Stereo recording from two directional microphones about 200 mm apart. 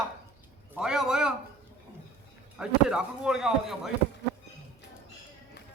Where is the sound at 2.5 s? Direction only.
5° right (ahead or behind).